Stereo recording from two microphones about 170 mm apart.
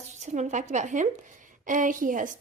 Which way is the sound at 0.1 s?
45° right (ahead or behind).